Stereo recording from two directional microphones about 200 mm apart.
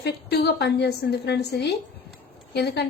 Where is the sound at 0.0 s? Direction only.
55° left (ahead or behind).